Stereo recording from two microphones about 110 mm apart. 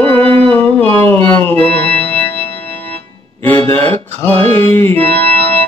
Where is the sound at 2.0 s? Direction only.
15° left (ahead or behind).